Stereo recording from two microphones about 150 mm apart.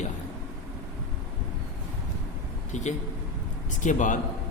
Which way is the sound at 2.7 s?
50° left (ahead or behind).